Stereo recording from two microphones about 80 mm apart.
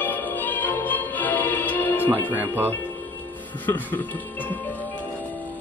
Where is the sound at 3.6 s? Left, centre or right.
Left.